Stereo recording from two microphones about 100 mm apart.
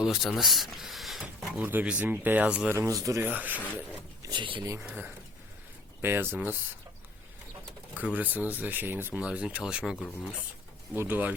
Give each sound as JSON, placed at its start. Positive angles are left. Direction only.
{"t": 0.0, "sound": "speech", "side_deg": -5}
{"t": 1.5, "sound": "speech", "side_deg": -15}
{"t": 2.7, "sound": "speech", "side_deg": -30}
{"t": 3.2, "sound": "speech", "side_deg": -15}
{"t": 4.2, "sound": "speech", "side_deg": -50}
{"t": 4.6, "sound": "speech", "side_deg": -30}
{"t": 4.9, "sound": "speech", "side_deg": -15}
{"t": 7.9, "sound": "speech", "side_deg": -15}
{"t": 10.9, "sound": "speech", "side_deg": -20}